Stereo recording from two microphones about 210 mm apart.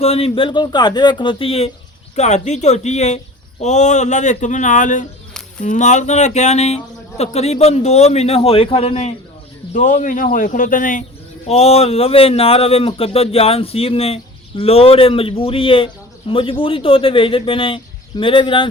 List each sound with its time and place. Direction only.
0.0 s a man's voice: 30° left (ahead or behind)